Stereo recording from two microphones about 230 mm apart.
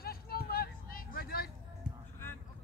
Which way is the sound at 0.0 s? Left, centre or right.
Left.